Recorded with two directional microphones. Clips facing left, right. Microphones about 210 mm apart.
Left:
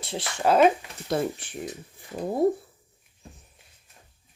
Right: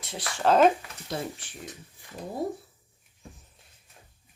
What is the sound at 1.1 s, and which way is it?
Speech, 55° left (ahead or behind).